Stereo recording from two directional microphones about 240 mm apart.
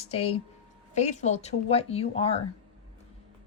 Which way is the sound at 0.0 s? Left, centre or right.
Left.